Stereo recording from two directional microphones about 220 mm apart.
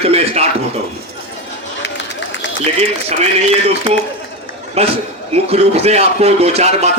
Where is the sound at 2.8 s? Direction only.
30° right (ahead or behind).